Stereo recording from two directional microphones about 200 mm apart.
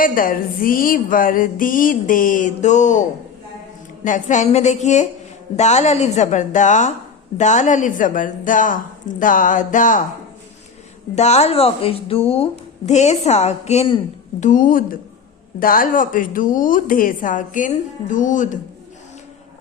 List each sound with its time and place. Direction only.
0.0 s music: 45° left (ahead or behind)
4.0 s a woman's voice: 40° left (ahead or behind)
11.1 s a woman's voice: 35° left (ahead or behind)
14.4 s music: 40° left (ahead or behind)
15.6 s a woman's voice: 45° left (ahead or behind)